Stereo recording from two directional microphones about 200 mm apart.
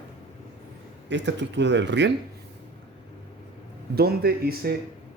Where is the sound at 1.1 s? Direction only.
60° right (ahead or behind).